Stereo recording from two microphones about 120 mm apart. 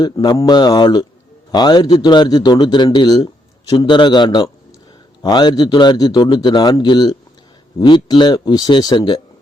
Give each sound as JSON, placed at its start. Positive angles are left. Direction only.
{"t": 0.0, "sound": "a man's voice", "side_deg": 35}